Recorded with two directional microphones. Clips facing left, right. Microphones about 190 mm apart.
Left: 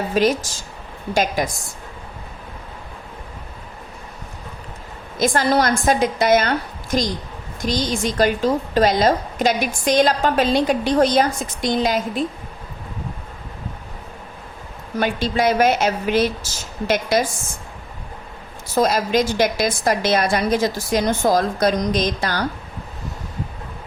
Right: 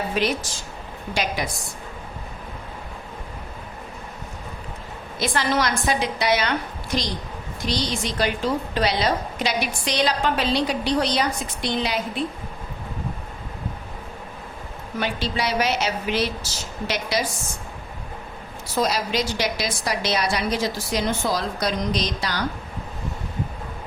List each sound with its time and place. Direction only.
0.1 s a woman's voice: 45° left (ahead or behind)
5.2 s a woman's voice: 45° left (ahead or behind)
14.9 s a woman's voice: 50° left (ahead or behind)
18.7 s a woman's voice: 50° left (ahead or behind)